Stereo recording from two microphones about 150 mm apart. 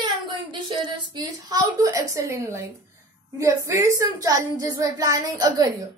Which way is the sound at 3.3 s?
20° right (ahead or behind).